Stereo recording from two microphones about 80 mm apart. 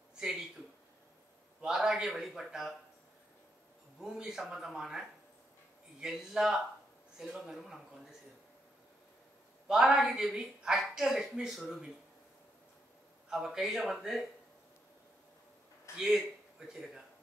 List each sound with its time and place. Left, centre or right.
1.6 s a woman's voice: centre
4.0 s a woman's voice: centre
9.7 s a woman's voice: centre
13.3 s a woman's voice: centre
16.0 s speech: centre